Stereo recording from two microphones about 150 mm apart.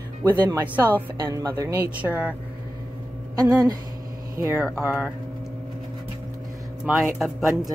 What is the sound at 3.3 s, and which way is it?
Speech, 25° right (ahead or behind).